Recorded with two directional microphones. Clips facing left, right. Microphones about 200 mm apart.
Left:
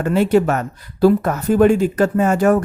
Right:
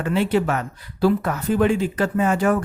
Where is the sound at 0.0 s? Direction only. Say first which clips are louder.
Left 5 dB; 45° left (ahead or behind).